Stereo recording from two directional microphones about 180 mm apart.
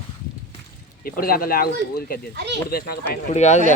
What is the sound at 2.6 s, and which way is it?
Speech, 60° left (ahead or behind).